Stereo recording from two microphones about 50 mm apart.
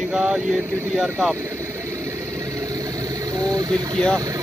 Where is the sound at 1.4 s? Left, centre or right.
Right.